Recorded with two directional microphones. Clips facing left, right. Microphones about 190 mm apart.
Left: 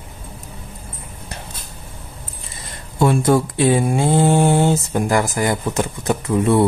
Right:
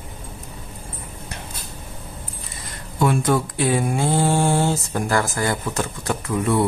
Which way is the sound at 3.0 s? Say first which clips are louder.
Left 4 dB; 30° left (ahead or behind).